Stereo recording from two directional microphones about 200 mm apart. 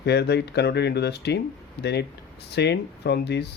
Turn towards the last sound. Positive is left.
turn(degrees=55)  # may be behind; listen again after turning